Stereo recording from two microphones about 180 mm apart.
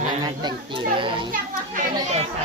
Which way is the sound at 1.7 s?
40° right (ahead or behind).